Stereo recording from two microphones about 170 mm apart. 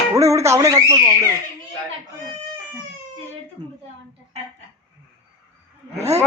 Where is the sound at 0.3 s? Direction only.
15° right (ahead or behind).